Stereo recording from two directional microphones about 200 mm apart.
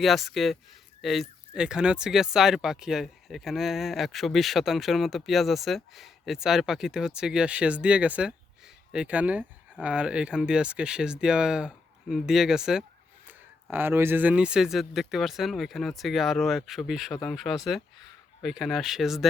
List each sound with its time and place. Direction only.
0.0 s speech: centre (ahead or behind)